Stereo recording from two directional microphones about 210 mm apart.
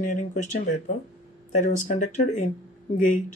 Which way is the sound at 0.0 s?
35° left (ahead or behind).